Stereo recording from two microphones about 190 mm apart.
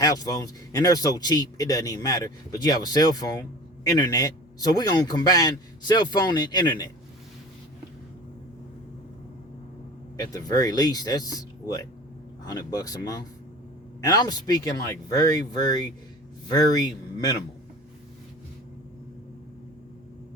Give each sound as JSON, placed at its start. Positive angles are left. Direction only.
{"t": 0.0, "sound": "speech", "side_deg": 20}
{"t": 10.2, "sound": "speech", "side_deg": 20}